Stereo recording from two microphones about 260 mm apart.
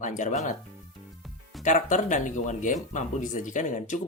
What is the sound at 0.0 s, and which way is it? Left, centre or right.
Speech, left.